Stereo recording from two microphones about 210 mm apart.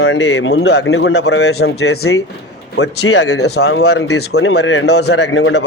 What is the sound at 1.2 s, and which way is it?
Speech, 90° left.